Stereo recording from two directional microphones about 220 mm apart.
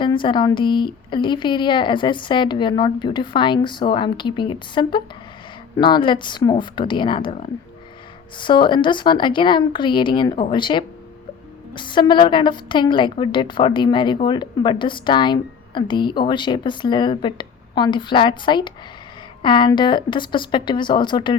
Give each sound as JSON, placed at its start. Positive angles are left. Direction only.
{"t": 0.0, "sound": "a woman's voice", "side_deg": 20}